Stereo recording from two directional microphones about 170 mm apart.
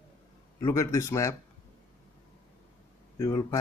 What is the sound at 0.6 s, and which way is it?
Speech, 20° left (ahead or behind).